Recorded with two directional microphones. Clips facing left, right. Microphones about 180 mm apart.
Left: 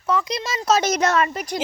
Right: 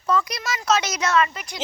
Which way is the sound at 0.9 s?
45° left (ahead or behind).